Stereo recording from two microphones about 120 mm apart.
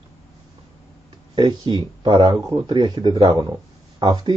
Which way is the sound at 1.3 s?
40° right (ahead or behind).